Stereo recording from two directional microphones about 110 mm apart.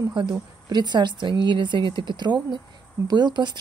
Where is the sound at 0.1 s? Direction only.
45° right (ahead or behind).